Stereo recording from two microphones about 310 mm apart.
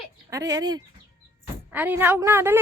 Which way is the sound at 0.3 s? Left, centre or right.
Centre.